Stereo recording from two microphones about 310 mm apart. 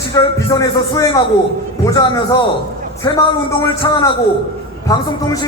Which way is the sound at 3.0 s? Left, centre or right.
Centre.